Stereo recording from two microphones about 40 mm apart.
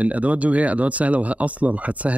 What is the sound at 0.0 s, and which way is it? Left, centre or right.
Speech, right.